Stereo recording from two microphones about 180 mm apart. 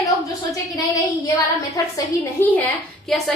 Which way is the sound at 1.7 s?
20° left (ahead or behind).